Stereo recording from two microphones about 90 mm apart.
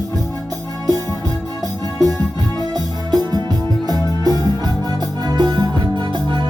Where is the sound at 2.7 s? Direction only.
50° right (ahead or behind).